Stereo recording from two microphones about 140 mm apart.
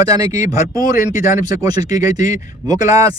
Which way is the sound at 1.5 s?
25° right (ahead or behind).